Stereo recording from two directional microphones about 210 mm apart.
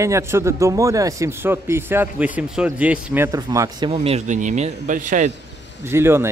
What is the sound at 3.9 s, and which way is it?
Speech, 30° right (ahead or behind).